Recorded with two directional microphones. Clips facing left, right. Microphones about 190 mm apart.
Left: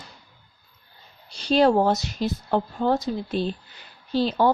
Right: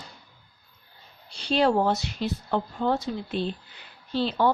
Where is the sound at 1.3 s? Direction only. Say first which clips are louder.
Left 4 dB; 40° left (ahead or behind).